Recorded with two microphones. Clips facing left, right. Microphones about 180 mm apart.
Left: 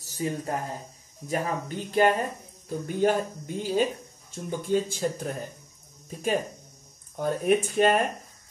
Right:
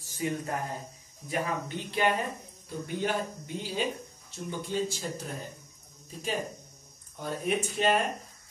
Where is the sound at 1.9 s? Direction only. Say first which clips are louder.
Left 6 dB; 40° left (ahead or behind).